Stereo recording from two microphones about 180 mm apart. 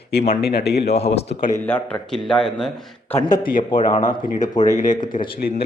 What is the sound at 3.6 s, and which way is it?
Speech, 25° left (ahead or behind).